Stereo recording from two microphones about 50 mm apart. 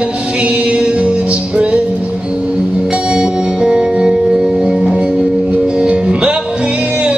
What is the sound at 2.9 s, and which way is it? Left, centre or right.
Music, right.